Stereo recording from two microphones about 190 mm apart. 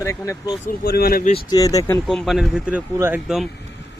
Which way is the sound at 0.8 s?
55° left (ahead or behind).